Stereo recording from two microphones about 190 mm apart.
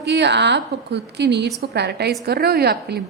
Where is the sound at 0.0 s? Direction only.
60° right (ahead or behind).